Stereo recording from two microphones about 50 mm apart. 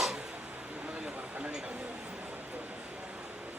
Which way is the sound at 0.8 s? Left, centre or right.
Right.